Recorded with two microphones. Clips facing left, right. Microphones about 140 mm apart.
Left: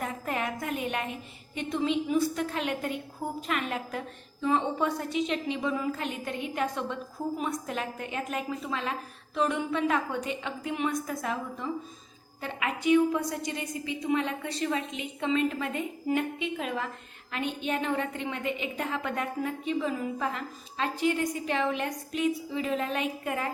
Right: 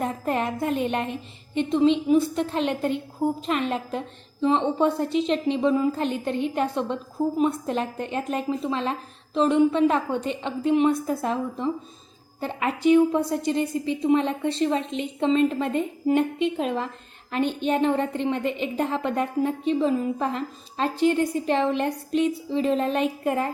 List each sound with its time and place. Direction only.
0.0 s music: 30° right (ahead or behind)
1.5 s a woman's voice: 25° right (ahead or behind)